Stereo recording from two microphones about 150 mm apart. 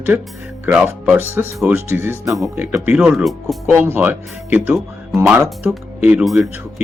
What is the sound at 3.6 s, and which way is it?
Speech, 15° right (ahead or behind).